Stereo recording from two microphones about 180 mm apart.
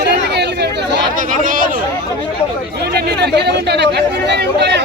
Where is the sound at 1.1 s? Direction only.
45° right (ahead or behind).